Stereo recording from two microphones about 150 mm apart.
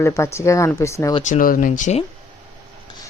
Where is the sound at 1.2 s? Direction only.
60° left (ahead or behind).